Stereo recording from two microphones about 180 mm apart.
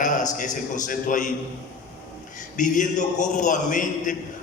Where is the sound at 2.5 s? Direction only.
45° left (ahead or behind).